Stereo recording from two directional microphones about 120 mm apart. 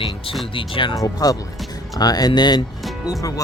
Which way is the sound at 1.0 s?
30° left (ahead or behind).